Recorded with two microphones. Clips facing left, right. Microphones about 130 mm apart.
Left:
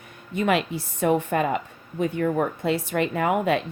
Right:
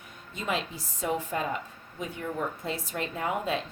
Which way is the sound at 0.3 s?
70° left (ahead or behind).